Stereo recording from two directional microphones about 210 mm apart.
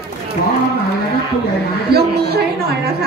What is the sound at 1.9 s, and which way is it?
A woman's voice, 50° right (ahead or behind).